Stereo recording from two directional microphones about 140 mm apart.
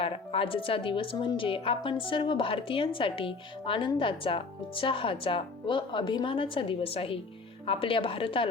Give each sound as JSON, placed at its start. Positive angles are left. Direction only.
{"t": 0.0, "sound": "a woman's voice", "side_deg": 40}